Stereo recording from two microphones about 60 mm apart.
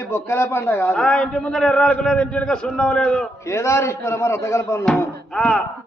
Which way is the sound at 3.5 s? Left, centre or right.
Left.